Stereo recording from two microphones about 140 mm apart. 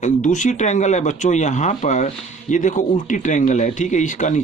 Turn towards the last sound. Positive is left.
turn(degrees=60)  # may be behind; listen again after turning